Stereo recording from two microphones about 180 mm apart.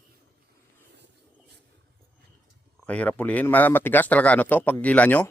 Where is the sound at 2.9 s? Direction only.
5° left (ahead or behind).